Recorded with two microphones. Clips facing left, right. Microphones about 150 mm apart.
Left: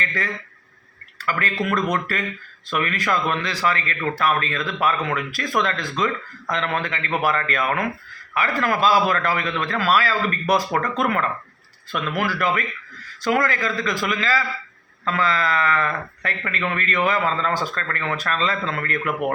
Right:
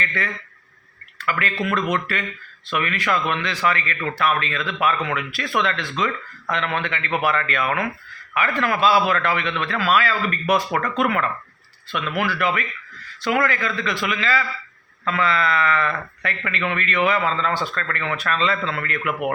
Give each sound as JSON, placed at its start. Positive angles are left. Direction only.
{"t": 0.0, "sound": "speech", "side_deg": 35}